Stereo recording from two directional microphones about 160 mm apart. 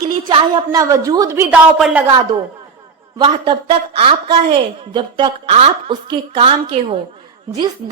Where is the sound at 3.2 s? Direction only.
30° right (ahead or behind).